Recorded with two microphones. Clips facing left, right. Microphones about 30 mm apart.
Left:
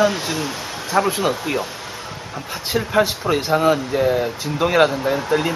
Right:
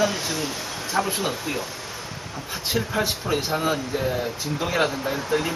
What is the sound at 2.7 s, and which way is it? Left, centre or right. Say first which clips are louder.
Speech: left 7 dB; left.